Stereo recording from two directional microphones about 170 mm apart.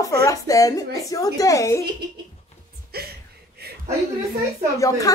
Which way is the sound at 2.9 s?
65° right (ahead or behind).